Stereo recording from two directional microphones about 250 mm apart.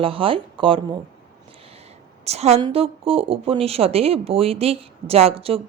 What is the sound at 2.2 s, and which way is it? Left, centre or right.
Speech, right.